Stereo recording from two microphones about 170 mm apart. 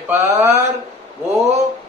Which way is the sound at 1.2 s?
40° right (ahead or behind).